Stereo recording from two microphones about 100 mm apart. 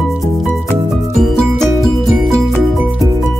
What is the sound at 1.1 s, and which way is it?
Music, 5° left (ahead or behind).